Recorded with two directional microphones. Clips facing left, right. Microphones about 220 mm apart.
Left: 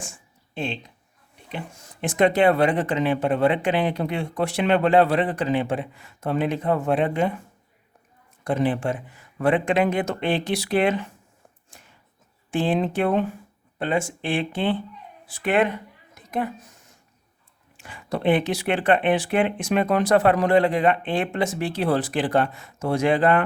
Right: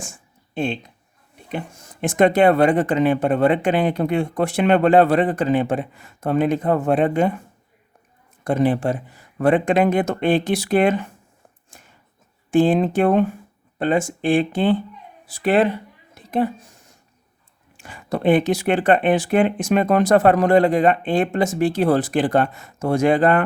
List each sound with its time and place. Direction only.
0.5 s speech: 50° right (ahead or behind)
8.4 s speech: 45° right (ahead or behind)
11.7 s a sound: 45° right (ahead or behind)
12.5 s speech: 45° right (ahead or behind); by 16.7 s 30° right (ahead or behind)
17.7 s speech: 45° right (ahead or behind)